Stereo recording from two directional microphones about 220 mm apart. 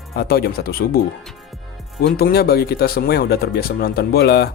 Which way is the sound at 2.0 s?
45° left (ahead or behind).